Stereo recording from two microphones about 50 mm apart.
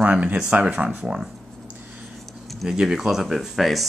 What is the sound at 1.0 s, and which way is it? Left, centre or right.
Speech, centre.